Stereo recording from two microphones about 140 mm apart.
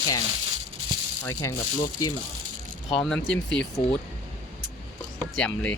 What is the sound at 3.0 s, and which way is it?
Speech, 5° left (ahead or behind).